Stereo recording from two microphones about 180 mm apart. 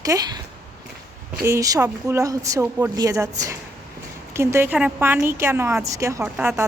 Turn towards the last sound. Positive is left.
turn(degrees=-10)  # may be behind; listen again after turning